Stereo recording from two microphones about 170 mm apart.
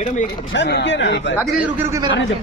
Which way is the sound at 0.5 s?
85° left.